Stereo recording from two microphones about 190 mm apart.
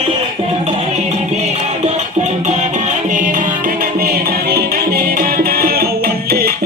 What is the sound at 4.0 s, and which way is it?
Music, 55° right (ahead or behind).